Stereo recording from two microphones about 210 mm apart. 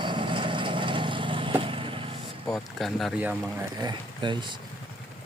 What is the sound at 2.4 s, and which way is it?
Speech, 5° left (ahead or behind).